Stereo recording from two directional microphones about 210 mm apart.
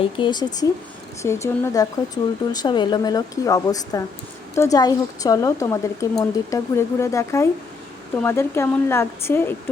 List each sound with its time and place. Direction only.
0.0 s a woman's voice: 20° left (ahead or behind)